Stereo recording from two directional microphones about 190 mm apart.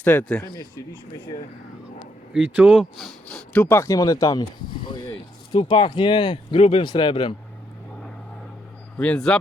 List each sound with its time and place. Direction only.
0.0 s speech: 10° left (ahead or behind)
2.3 s speech: 5° right (ahead or behind); by 7.3 s 25° left (ahead or behind)
9.0 s speech: 5° left (ahead or behind)